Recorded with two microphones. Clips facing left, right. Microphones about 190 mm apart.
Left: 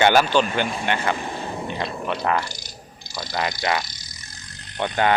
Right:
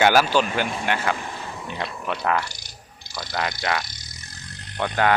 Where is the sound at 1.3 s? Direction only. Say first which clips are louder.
Left 5 dB; 35° left (ahead or behind).